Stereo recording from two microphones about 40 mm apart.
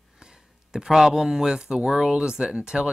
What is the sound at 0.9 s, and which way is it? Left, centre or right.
Speech, centre.